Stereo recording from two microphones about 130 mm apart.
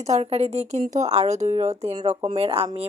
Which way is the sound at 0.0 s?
60° right (ahead or behind).